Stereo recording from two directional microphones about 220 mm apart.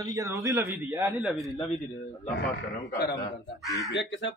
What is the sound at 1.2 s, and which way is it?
Speech, centre (ahead or behind).